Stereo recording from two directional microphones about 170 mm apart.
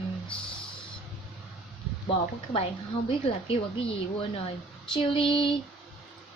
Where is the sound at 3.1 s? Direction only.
35° left (ahead or behind).